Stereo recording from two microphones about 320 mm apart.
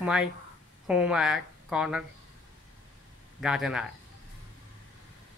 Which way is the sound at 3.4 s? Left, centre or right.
Centre.